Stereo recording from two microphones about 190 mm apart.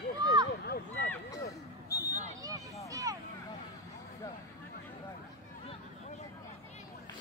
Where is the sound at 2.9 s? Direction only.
15° right (ahead or behind).